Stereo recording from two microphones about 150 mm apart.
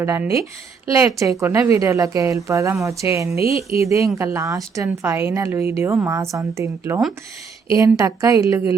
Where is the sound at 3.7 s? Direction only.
20° right (ahead or behind).